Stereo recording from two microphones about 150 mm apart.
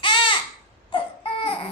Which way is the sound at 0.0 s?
30° left (ahead or behind).